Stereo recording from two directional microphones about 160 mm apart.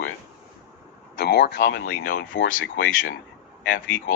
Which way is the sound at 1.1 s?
90° left.